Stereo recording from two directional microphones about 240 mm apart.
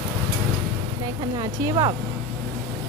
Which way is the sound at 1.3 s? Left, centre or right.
Centre.